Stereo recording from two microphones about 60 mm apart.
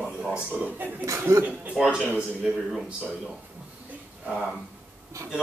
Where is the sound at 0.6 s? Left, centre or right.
Right.